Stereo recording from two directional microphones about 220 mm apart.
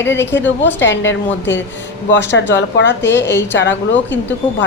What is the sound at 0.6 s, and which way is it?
A woman's voice, 55° left (ahead or behind).